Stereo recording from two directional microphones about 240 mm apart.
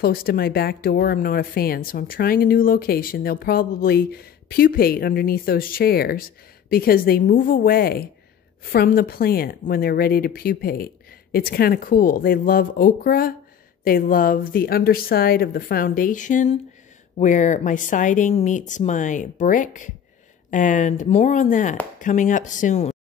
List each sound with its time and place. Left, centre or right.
0.0 s speech: left